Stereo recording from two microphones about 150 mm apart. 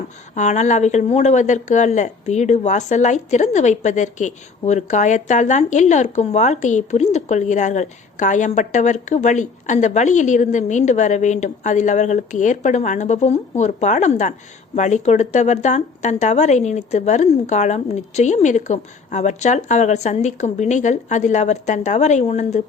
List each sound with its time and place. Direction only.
0.3 s speech: 50° left (ahead or behind)